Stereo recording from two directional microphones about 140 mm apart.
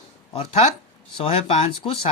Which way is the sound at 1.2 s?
45° left (ahead or behind).